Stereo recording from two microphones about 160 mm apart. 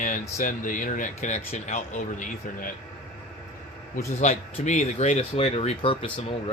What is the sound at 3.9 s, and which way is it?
Speech, 45° left (ahead or behind).